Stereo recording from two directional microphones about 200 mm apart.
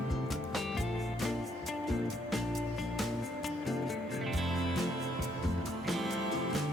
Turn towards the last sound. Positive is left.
turn(degrees=0)  # may be behind; listen again after turning